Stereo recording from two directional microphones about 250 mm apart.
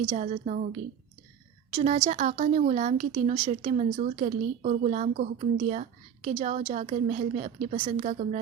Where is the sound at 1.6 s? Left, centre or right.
Right.